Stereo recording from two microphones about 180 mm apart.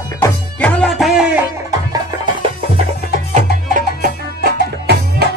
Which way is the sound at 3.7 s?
55° right (ahead or behind).